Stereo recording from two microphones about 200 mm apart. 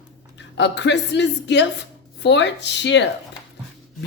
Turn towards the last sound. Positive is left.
turn(degrees=60)  # may be behind; listen again after turning